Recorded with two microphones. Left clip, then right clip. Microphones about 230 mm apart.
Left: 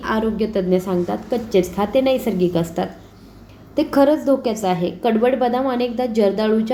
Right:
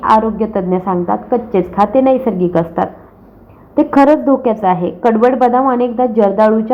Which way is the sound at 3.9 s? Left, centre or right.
Centre.